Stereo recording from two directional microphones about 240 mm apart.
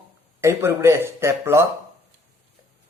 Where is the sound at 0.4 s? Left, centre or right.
Centre.